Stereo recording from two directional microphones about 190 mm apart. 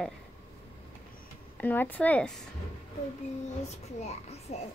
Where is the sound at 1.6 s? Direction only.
10° left (ahead or behind).